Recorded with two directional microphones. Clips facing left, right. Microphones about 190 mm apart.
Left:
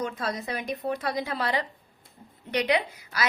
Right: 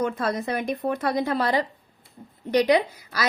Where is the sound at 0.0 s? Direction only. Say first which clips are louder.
Right 5 dB; 55° right (ahead or behind).